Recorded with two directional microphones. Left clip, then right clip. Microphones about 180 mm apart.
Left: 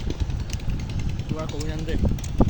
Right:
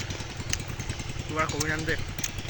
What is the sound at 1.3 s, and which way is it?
Speech, centre (ahead or behind).